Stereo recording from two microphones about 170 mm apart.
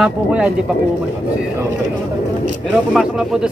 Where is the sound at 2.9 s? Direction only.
5° right (ahead or behind).